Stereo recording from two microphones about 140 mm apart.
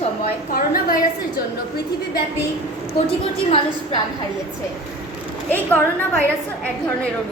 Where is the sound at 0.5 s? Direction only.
90° left.